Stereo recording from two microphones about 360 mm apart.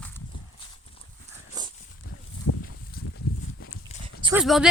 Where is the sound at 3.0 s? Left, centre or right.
Left.